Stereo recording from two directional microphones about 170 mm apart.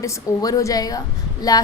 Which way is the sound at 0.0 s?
20° left (ahead or behind).